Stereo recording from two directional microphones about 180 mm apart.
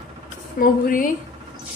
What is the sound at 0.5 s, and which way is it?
Speech, 50° left (ahead or behind).